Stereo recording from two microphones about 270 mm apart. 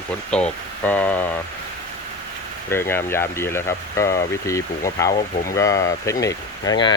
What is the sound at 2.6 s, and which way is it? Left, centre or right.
Speech, centre.